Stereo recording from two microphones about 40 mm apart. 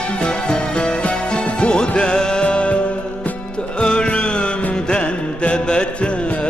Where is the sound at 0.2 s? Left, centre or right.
Left.